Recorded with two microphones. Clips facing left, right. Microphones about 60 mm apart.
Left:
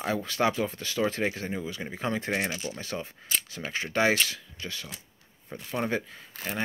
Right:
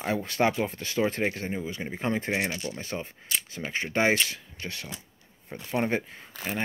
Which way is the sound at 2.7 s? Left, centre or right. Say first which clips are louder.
Right 1 dB; right.